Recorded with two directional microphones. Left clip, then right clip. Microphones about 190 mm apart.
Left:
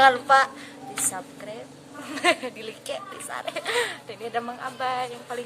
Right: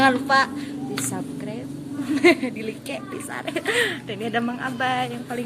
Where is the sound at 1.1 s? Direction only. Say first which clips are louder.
Right 3 dB; 5° left (ahead or behind).